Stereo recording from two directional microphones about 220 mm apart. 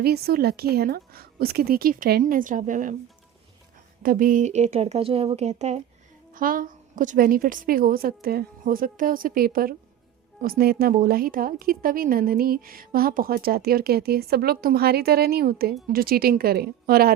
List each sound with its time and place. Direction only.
0.0 s a woman's voice: 45° right (ahead or behind)
4.0 s a woman's voice: 40° right (ahead or behind)